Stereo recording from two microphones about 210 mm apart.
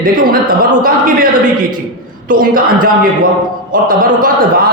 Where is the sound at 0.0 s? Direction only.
40° right (ahead or behind).